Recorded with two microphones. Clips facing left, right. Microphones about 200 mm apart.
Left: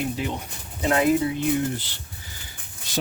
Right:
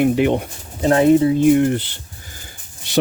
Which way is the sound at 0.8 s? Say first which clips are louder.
Right 8 dB; 30° right (ahead or behind).